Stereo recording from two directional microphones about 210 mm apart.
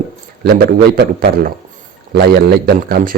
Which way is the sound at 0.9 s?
50° right (ahead or behind).